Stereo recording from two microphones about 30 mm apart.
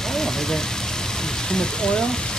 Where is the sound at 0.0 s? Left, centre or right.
Centre.